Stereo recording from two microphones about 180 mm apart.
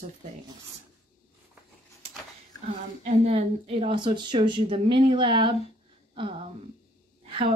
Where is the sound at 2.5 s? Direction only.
20° left (ahead or behind).